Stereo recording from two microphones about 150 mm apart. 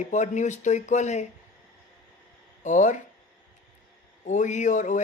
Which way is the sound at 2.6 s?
55° left (ahead or behind).